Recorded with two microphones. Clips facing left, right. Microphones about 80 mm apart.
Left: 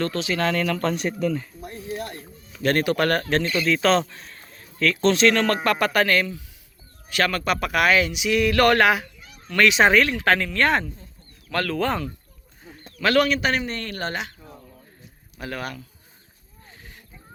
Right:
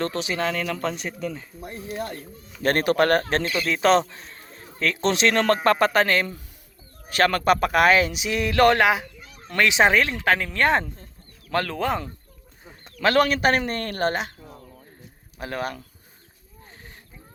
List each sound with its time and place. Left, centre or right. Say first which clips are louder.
0.0 s a man's voice: left 1 dB; right
0.4 s speech: left 5 dB; centre
2.6 s speech: right 1 dB; right
3.4 s speech: left 1 dB; centre
3.7 s speech: right 2 dB; right
5.3 s a man's voice: right 2 dB; right
7.1 s a man's voice: right 4 dB; right
13.0 s speech: even; right
15.4 s speech: right 2 dB; right